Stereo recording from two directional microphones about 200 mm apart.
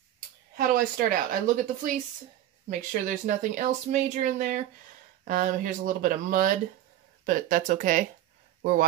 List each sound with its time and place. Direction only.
0.6 s a woman's voice: 45° right (ahead or behind)